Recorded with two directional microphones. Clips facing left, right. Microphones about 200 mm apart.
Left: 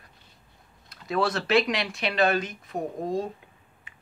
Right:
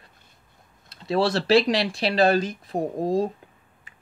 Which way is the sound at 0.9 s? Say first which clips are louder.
Right 4 dB; 30° right (ahead or behind).